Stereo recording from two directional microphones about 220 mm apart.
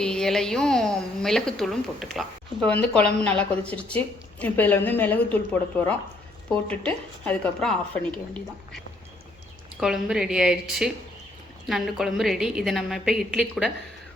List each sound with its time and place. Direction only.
0.0 s a woman's voice: 5° left (ahead or behind)
9.8 s a woman's voice: centre (ahead or behind)